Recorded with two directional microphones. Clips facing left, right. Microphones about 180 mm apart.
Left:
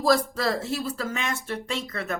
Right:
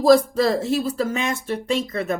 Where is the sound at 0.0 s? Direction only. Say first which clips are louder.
Right 7 dB; 20° right (ahead or behind).